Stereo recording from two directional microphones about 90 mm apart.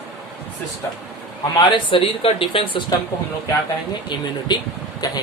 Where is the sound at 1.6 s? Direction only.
65° left (ahead or behind).